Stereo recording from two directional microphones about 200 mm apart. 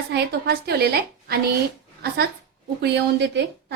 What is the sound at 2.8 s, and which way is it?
Speech, 60° right (ahead or behind).